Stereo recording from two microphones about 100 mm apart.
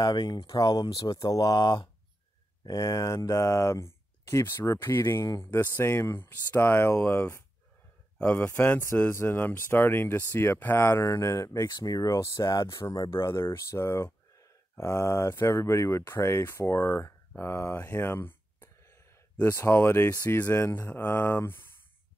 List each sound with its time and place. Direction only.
0.0 s speech: 45° left (ahead or behind); by 17.1 s 25° left (ahead or behind)
17.4 s a sound: 25° left (ahead or behind)
19.5 s speech: 25° left (ahead or behind)